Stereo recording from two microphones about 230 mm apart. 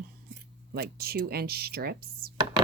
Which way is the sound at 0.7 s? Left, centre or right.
Right.